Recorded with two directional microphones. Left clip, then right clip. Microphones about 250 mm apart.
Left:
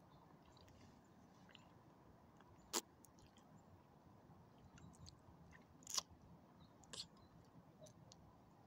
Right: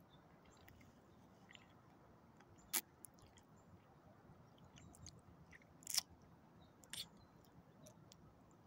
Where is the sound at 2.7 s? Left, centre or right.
Left.